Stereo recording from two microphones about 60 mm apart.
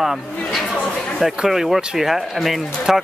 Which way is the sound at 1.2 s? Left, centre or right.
Centre.